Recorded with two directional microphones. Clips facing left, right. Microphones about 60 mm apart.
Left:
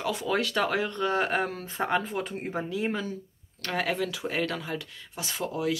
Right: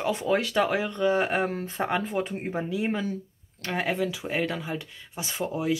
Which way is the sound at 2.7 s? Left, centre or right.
Centre.